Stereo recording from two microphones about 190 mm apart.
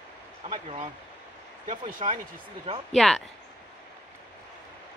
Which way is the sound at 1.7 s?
45° right (ahead or behind).